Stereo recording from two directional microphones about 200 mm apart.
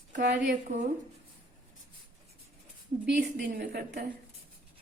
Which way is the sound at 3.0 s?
50° right (ahead or behind).